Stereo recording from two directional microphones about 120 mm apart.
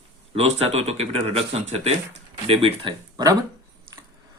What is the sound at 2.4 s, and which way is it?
Speech, 50° right (ahead or behind).